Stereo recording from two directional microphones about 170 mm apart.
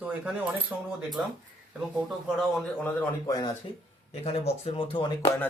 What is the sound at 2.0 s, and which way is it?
Speech, centre (ahead or behind).